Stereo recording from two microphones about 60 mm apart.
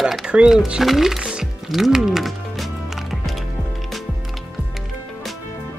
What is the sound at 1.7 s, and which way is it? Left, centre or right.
Music, centre.